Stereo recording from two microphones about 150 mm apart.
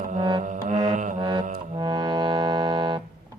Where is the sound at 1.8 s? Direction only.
30° right (ahead or behind).